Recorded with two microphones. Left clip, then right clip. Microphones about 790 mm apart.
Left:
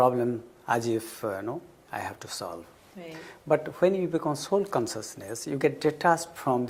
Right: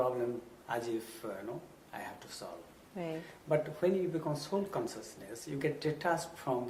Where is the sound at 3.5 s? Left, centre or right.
Left.